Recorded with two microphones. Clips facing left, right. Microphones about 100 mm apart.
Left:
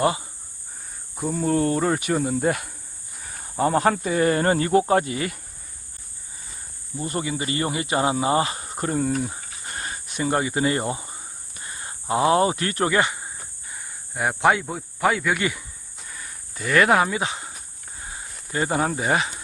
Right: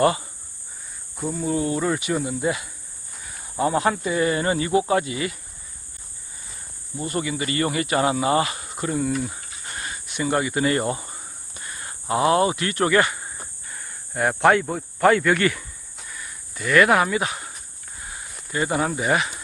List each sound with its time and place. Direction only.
1.4 s speech: 50° left (ahead or behind)
2.5 s speech: 55° left (ahead or behind)
3.6 s speech: 40° left (ahead or behind)
7.1 s speech: 30° left (ahead or behind); by 11.2 s 15° left (ahead or behind)
11.6 s speech: 25° left (ahead or behind)
16.0 s a sound: 35° left (ahead or behind)
18.5 s speech: 30° left (ahead or behind)